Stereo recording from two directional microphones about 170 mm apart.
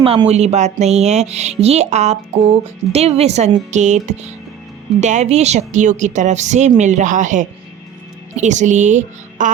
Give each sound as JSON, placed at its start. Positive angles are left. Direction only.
{"t": 0.0, "sound": "a woman's voice", "side_deg": -35}